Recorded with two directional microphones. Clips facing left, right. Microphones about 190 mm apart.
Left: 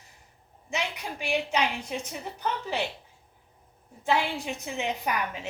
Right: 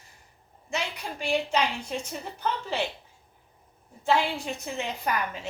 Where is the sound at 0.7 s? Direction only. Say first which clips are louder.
Even; 15° left (ahead or behind).